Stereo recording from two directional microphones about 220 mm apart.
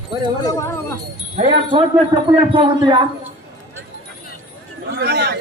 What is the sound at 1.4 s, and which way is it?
A man's voice, 25° right (ahead or behind).